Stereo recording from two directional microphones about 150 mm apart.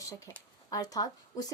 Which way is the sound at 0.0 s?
20° left (ahead or behind).